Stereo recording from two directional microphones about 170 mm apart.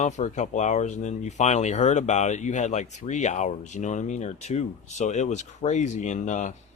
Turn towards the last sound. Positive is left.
turn(degrees=45)  # may be behind; listen again after turning